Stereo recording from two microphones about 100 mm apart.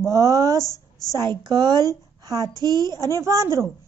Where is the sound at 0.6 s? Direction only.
35° left (ahead or behind).